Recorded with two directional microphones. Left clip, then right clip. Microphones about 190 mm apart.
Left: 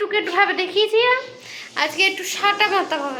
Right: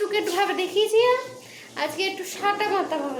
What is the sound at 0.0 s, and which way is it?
A woman's voice, 5° right (ahead or behind).